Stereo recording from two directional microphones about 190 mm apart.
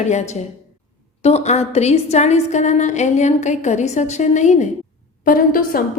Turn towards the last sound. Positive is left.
turn(degrees=45)  # may be behind; listen again after turning